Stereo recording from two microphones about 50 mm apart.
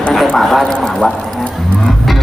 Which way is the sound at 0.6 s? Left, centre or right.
Centre.